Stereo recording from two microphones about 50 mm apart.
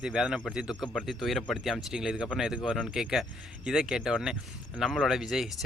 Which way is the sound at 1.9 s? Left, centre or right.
Centre.